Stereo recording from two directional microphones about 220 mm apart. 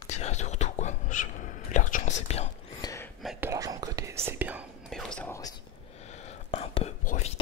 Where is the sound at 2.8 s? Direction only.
15° left (ahead or behind).